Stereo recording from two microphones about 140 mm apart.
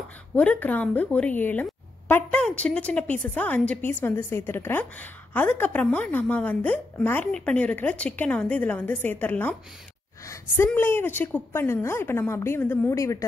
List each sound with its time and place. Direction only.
0.4 s a woman's voice: 10° left (ahead or behind)